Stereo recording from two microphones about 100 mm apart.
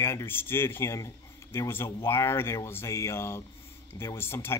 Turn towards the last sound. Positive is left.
turn(degrees=25)  # may be behind; listen again after turning